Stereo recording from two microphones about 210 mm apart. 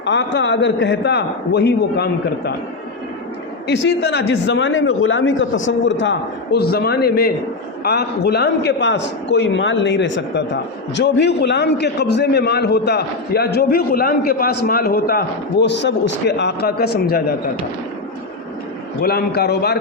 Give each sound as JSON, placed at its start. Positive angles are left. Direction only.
{"t": 0.0, "sound": "a man's voice", "side_deg": 60}
{"t": 3.7, "sound": "a man's voice", "side_deg": 55}
{"t": 15.6, "sound": "a man's voice", "side_deg": 55}
{"t": 19.0, "sound": "a man's voice", "side_deg": 50}